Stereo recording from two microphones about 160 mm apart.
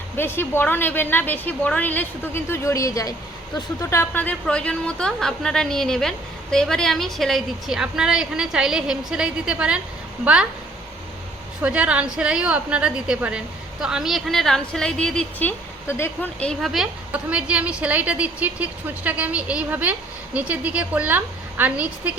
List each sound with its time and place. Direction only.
0.2 s a woman's voice: 15° left (ahead or behind); by 9.8 s 5° right (ahead or behind)
11.6 s a woman's voice: 10° right (ahead or behind)